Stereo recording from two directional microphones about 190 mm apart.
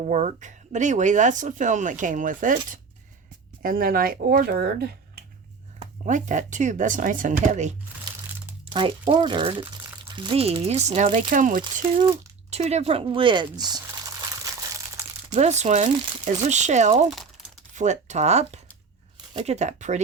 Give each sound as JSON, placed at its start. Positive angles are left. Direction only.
{"t": 0.0, "sound": "speech", "side_deg": -40}
{"t": 5.8, "sound": "speech", "side_deg": -40}
{"t": 8.6, "sound": "speech", "side_deg": -30}
{"t": 11.3, "sound": "speech", "side_deg": -45}
{"t": 15.4, "sound": "speech", "side_deg": -35}